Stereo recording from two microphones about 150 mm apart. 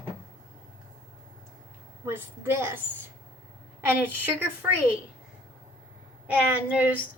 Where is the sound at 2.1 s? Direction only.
15° right (ahead or behind).